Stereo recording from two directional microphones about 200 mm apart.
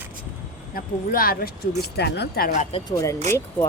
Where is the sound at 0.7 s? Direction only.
45° left (ahead or behind).